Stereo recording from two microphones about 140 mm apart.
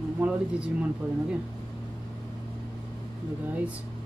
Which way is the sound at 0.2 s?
10° right (ahead or behind).